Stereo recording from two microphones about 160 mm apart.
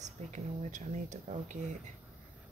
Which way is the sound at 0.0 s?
50° right (ahead or behind).